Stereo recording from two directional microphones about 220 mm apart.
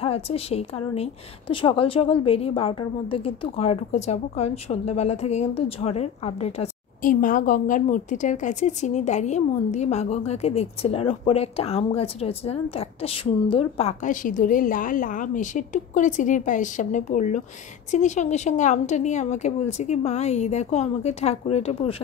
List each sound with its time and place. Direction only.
0.0 s a woman's voice: 25° left (ahead or behind)